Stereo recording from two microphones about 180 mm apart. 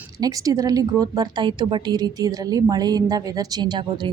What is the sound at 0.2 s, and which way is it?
A woman's voice, 20° right (ahead or behind).